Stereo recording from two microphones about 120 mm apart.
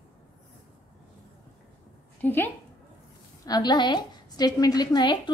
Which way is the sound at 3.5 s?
35° left (ahead or behind).